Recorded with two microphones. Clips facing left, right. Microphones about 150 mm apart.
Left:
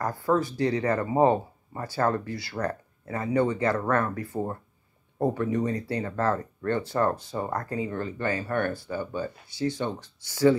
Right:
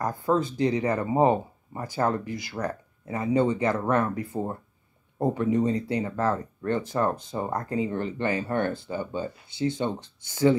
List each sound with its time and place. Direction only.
0.0 s speech: 20° right (ahead or behind)